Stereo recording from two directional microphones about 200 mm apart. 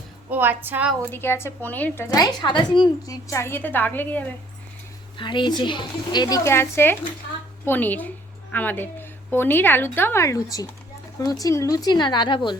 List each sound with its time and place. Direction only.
0.3 s a woman's voice: 10° right (ahead or behind)
1.1 s a woman's voice: 10° left (ahead or behind)
5.1 s a woman's voice: 25° left (ahead or behind)